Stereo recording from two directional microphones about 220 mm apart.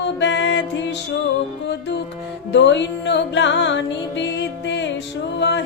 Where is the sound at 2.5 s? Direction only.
55° left (ahead or behind).